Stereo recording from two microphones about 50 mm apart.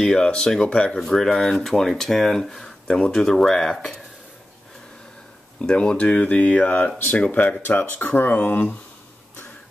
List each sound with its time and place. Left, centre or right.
0.0 s speech: centre
1.0 s speech: centre
5.6 s speech: left